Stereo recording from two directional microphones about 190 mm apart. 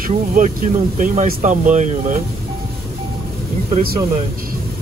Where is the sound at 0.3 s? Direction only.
45° right (ahead or behind).